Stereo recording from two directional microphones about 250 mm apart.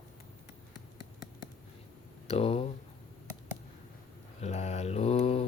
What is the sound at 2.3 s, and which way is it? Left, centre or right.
Speech, left.